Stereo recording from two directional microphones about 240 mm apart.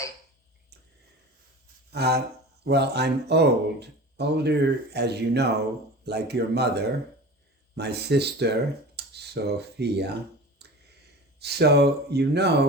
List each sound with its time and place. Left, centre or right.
1.9 s speech: right
10.6 s a sound: right
11.3 s speech: right